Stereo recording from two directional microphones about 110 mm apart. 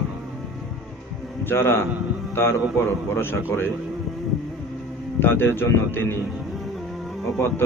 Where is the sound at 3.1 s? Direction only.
20° left (ahead or behind).